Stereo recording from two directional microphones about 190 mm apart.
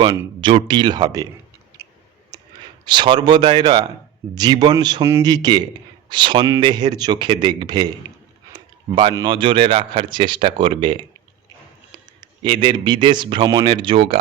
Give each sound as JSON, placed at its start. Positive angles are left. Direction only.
{"t": 0.0, "sound": "speech", "side_deg": -20}
{"t": 2.8, "sound": "speech", "side_deg": -25}
{"t": 12.4, "sound": "speech", "side_deg": -25}